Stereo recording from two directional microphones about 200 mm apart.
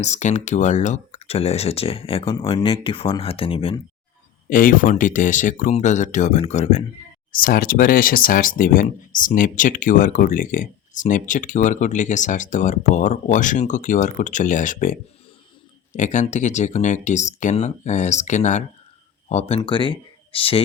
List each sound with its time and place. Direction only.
0.0 s speech: 35° left (ahead or behind)
4.4 s speech: 45° left (ahead or behind)
7.3 s speech: 45° left (ahead or behind)
16.0 s speech: 40° left (ahead or behind)